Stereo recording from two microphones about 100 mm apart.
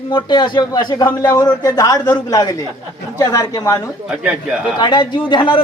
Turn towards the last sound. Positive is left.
turn(degrees=60)  # may be behind; listen again after turning